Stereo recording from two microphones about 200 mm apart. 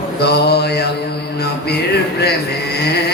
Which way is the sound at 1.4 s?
55° left (ahead or behind).